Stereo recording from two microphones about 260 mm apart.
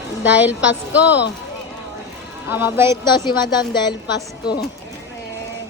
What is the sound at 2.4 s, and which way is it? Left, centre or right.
Speech, centre.